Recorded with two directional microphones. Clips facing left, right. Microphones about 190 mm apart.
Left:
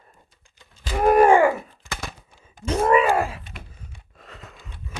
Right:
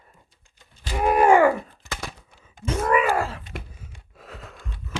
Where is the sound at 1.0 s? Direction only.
45° left (ahead or behind).